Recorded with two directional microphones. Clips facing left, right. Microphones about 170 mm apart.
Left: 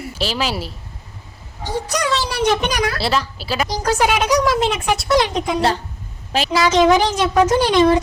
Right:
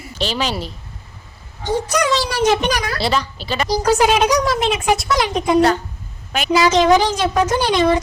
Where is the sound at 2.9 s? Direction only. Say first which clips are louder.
Right 1 dB; 5° left (ahead or behind).